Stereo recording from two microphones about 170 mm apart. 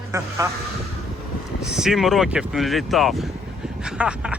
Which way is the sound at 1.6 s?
5° right (ahead or behind).